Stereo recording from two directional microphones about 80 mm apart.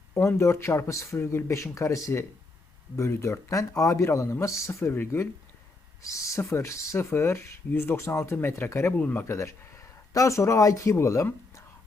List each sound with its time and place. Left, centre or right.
0.3 s speech: left
6.0 s speech: left
9.0 s speech: centre
9.2 s speech: left